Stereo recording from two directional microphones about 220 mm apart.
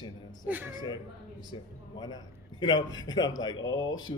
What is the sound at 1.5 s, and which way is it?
A man's voice, 20° left (ahead or behind).